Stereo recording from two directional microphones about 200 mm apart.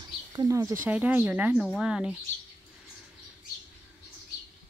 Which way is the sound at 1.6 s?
Centre (ahead or behind).